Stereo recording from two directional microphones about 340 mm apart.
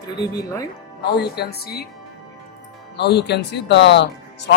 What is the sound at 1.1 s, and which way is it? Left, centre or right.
Speech, left.